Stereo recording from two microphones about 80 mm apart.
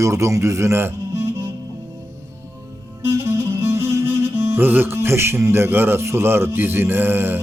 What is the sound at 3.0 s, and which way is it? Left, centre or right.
Music, right.